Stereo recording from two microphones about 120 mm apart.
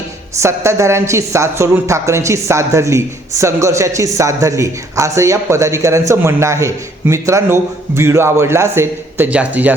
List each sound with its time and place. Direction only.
0.3 s a woman's voice: 25° right (ahead or behind)